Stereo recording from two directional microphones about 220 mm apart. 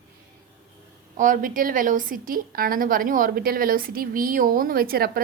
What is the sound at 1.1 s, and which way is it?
A woman's voice, 35° right (ahead or behind).